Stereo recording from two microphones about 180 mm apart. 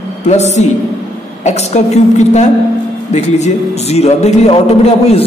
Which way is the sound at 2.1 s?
40° left (ahead or behind).